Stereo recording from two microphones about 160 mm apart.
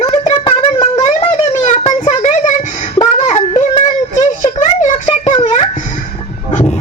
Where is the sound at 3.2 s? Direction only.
45° left (ahead or behind).